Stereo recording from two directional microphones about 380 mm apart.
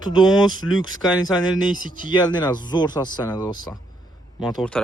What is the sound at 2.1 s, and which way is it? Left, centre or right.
Speech, centre.